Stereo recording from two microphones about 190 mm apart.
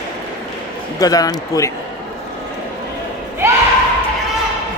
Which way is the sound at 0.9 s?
20° left (ahead or behind).